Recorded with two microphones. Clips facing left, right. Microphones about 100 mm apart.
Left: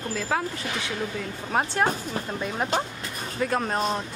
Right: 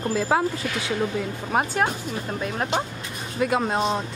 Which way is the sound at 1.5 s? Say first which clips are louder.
Right 1 dB; 5° right (ahead or behind).